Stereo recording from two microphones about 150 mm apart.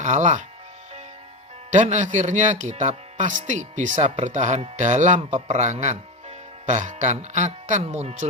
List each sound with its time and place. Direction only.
0.0 s speech: 55° right (ahead or behind)
1.7 s speech: 55° right (ahead or behind)